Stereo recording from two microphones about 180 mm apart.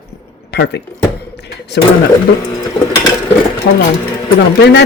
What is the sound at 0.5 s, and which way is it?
Speech, 70° left (ahead or behind).